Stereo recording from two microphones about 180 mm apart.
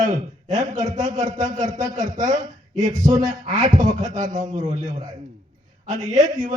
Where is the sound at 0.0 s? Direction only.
45° right (ahead or behind).